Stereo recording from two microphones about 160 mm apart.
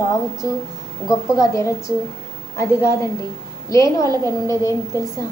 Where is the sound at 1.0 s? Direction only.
20° left (ahead or behind).